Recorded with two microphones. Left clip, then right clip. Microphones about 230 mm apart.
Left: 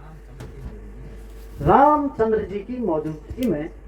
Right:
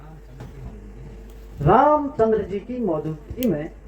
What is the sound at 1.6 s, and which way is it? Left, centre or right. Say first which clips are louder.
Speech: left 1 dB; right.